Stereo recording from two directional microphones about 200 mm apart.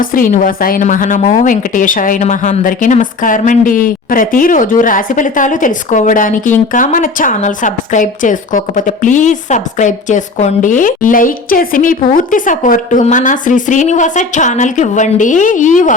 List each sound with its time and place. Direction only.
0.0 s a woman's voice: 45° left (ahead or behind)